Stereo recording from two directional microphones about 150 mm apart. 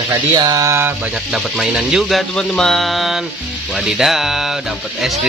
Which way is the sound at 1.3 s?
5° right (ahead or behind).